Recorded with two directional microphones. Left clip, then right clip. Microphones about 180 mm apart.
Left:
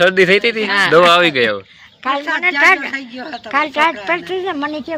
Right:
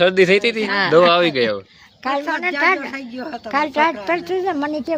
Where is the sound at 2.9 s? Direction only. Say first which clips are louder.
Left 3 dB; 60° right (ahead or behind).